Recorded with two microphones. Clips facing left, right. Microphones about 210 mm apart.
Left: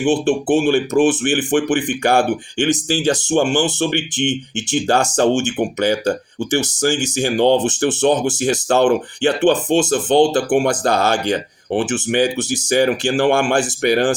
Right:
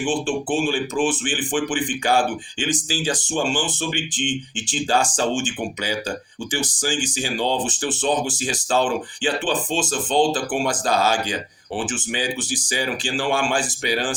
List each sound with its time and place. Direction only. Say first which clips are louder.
0.0 s speech: left 7 dB; 65° left (ahead or behind)